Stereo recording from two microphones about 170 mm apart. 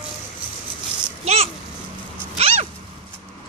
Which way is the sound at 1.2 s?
40° right (ahead or behind).